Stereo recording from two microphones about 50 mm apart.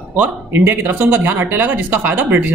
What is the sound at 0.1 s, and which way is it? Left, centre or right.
Speech, right.